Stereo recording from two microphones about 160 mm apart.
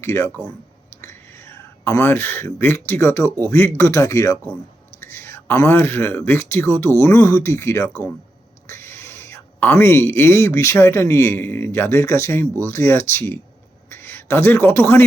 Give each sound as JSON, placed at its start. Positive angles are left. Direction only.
{"t": 0.0, "sound": "speech", "side_deg": 15}